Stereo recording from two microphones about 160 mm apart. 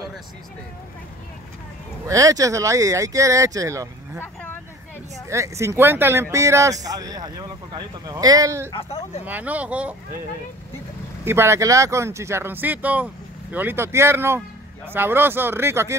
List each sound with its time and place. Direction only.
2.0 s speech: 20° right (ahead or behind)
5.3 s speech: 20° right (ahead or behind)
8.7 s speech: 40° left (ahead or behind)
9.2 s speech: 10° right (ahead or behind)
11.2 s speech: 15° right (ahead or behind)